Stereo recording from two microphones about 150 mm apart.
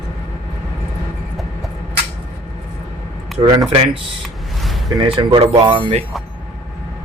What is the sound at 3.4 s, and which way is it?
Speech, 35° right (ahead or behind).